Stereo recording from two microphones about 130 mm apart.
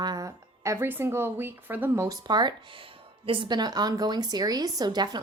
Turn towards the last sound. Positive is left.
turn(degrees=-35)  # may be behind; listen again after turning